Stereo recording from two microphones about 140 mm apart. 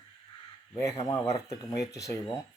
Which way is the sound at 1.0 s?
25° left (ahead or behind).